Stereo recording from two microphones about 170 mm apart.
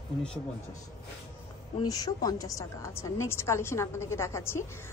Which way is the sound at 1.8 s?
20° left (ahead or behind).